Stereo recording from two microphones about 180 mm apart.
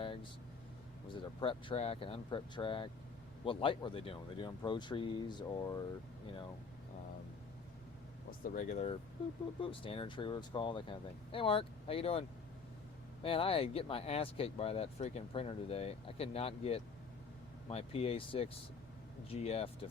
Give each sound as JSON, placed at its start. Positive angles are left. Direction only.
{"t": 0.0, "sound": "vehicle", "side_deg": 30}
{"t": 1.0, "sound": "speech", "side_deg": 25}
{"t": 8.4, "sound": "speech", "side_deg": 45}
{"t": 13.2, "sound": "speech", "side_deg": 30}